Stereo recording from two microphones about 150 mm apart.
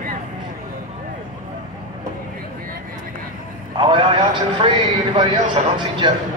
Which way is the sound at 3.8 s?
35° right (ahead or behind).